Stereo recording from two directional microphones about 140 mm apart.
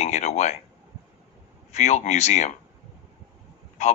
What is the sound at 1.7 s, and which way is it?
Speech, 55° left (ahead or behind).